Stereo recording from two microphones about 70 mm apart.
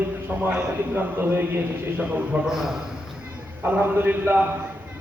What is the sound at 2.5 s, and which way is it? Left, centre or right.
Speech, centre.